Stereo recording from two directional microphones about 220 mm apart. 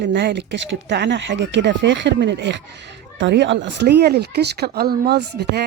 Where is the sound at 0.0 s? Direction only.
55° right (ahead or behind).